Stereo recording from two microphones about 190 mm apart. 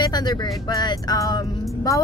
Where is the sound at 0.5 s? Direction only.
20° left (ahead or behind).